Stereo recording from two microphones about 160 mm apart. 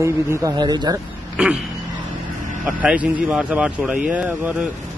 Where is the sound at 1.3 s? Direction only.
5° right (ahead or behind).